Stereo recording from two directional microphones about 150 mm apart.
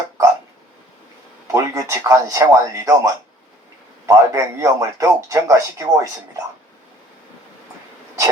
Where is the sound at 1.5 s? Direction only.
20° right (ahead or behind).